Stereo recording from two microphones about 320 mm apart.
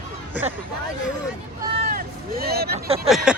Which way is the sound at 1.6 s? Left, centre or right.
Right.